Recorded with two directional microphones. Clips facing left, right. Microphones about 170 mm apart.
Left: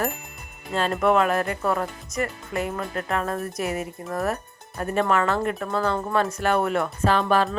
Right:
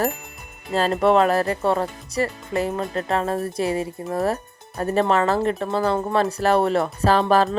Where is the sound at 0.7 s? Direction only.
35° right (ahead or behind).